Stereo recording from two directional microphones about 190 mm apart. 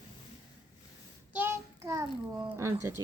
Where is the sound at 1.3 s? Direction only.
10° right (ahead or behind).